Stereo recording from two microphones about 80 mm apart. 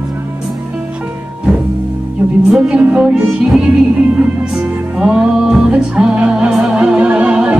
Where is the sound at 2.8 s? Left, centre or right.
Centre.